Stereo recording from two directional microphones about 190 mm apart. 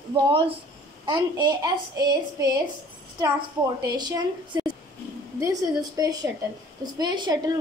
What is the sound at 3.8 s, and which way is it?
A woman's voice, 20° right (ahead or behind).